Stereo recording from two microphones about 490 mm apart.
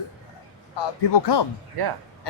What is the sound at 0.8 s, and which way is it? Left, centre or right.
Speech, left.